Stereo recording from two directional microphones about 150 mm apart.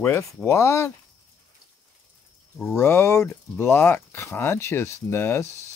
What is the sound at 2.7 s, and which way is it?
Speech, 15° left (ahead or behind).